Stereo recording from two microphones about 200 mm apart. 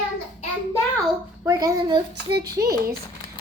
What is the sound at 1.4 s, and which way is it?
Speech, 15° right (ahead or behind).